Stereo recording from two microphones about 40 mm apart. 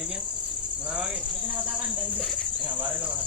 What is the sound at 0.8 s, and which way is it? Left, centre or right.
Speech, right.